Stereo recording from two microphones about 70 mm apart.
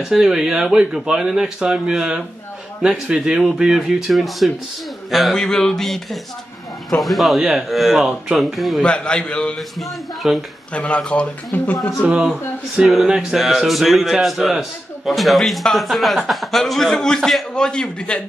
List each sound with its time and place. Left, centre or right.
0.1 s a man's voice: centre
8.8 s speech: centre
9.6 s a man's voice: centre
10.7 s speech: centre
12.7 s a man's voice: centre